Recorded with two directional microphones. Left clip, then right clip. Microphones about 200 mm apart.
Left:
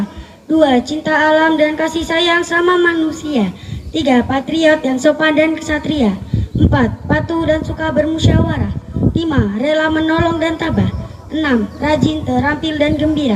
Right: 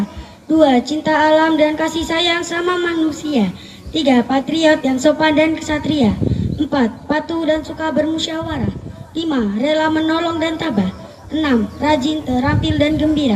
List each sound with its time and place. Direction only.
0.5 s a woman's voice: 20° left (ahead or behind)